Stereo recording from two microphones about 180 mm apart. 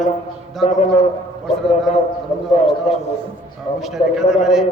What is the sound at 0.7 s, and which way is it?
Speech, 40° left (ahead or behind).